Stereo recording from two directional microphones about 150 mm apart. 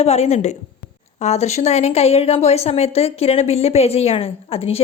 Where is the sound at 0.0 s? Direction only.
45° left (ahead or behind).